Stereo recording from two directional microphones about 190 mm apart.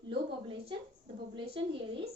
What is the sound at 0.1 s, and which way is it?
A woman's voice, 30° right (ahead or behind).